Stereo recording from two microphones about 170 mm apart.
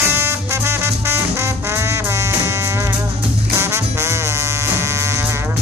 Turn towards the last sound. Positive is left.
turn(degrees=-15)  # may be behind; listen again after turning